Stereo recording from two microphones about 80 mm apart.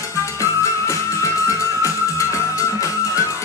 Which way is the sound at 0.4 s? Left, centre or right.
Left.